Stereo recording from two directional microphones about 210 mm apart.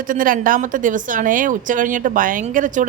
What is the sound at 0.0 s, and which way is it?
A woman's voice, 40° right (ahead or behind).